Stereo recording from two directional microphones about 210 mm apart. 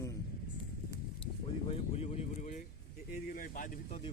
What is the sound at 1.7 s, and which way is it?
Speech, 30° left (ahead or behind).